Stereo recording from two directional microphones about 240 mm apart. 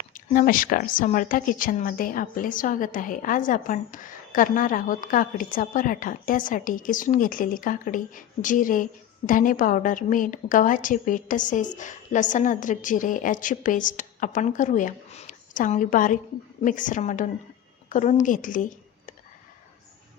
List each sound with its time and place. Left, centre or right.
0.1 s speech: left